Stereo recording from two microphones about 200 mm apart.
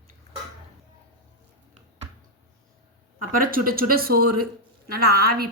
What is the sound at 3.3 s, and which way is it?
Speech, 45° right (ahead or behind).